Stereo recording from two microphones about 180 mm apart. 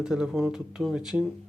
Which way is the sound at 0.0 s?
5° right (ahead or behind).